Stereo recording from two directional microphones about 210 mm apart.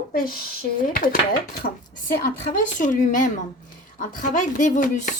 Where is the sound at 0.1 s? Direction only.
45° left (ahead or behind).